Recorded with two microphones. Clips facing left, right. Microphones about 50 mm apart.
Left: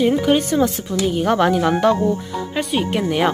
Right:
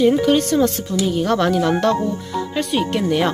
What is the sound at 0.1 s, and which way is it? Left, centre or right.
Speech, centre.